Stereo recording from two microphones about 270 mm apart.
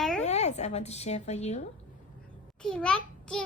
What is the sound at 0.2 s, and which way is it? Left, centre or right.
Speech, left.